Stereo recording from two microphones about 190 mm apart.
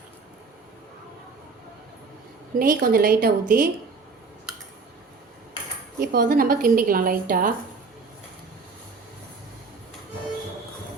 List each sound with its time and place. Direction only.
2.6 s a woman's voice: 50° right (ahead or behind)
6.0 s a woman's voice: 50° right (ahead or behind)